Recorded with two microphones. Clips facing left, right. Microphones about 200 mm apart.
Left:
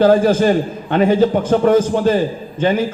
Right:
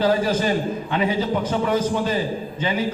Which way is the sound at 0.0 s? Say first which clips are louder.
Left 8 dB; 50° left (ahead or behind).